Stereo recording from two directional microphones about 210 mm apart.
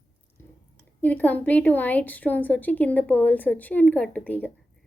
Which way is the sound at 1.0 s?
10° left (ahead or behind).